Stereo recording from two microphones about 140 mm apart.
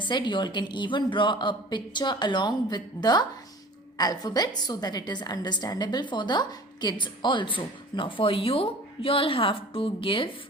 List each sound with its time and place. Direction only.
0.1 s a woman's voice: 35° left (ahead or behind)